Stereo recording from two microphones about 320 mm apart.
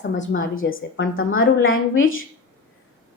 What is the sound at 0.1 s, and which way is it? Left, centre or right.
A woman's voice, left.